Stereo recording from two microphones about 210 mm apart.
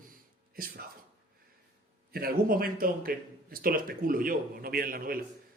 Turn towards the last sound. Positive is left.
turn(degrees=-45)  # may be behind; listen again after turning